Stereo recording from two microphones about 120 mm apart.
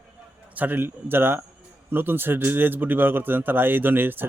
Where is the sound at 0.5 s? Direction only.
15° right (ahead or behind).